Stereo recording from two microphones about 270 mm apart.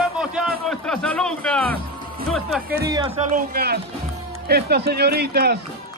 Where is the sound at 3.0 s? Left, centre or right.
Right.